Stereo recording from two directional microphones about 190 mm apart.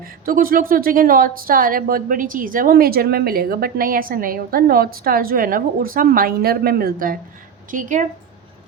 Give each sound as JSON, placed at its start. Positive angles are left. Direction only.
{"t": 0.0, "sound": "a woman's voice", "side_deg": -50}